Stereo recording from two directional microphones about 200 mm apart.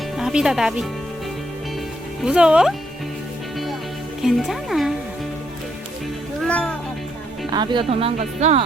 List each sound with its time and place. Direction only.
0.2 s speech: 5° right (ahead or behind)
2.2 s speech: 5° right (ahead or behind)
4.2 s speech: centre (ahead or behind)
6.4 s music: 5° left (ahead or behind)
7.5 s speech: 20° right (ahead or behind)